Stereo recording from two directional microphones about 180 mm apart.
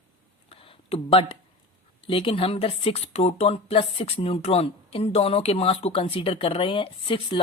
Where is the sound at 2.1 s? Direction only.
30° left (ahead or behind).